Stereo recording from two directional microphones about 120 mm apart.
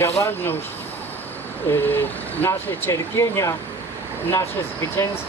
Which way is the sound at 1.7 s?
15° left (ahead or behind).